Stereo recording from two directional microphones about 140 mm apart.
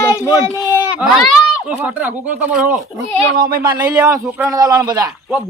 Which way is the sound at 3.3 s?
90° right.